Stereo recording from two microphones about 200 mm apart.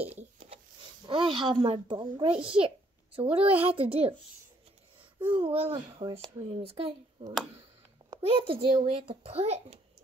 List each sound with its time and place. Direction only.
0.0 s a sound: 30° right (ahead or behind)
1.0 s a child's voice: 25° right (ahead or behind)
5.2 s a child's voice: 25° right (ahead or behind)